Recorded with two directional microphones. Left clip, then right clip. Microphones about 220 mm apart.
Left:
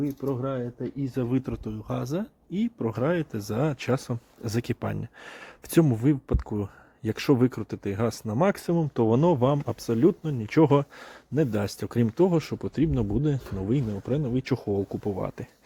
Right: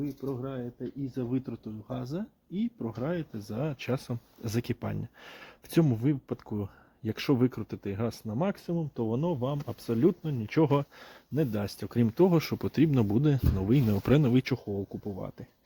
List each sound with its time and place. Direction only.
0.2 s speech: 35° left (ahead or behind)
9.8 s speech: 5° left (ahead or behind)
12.1 s speech: 10° right (ahead or behind)
13.8 s speech: 25° right (ahead or behind)
14.6 s speech: 25° left (ahead or behind)